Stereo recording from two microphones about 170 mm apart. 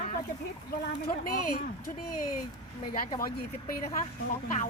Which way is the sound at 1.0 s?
60° left (ahead or behind).